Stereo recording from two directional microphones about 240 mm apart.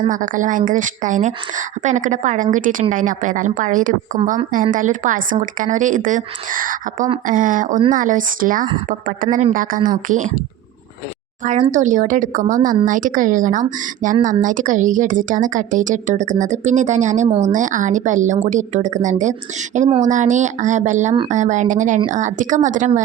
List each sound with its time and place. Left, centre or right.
0.1 s a woman's voice: right
11.7 s a woman's voice: right